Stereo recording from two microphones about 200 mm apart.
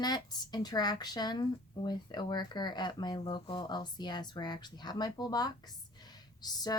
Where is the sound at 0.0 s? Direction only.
20° left (ahead or behind).